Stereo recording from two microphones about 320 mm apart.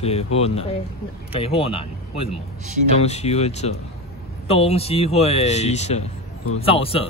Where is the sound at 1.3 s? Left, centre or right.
Centre.